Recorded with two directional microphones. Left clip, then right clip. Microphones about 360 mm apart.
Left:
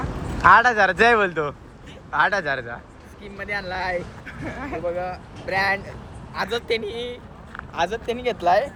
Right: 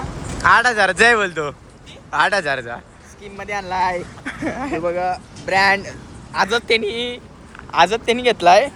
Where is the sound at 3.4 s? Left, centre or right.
Centre.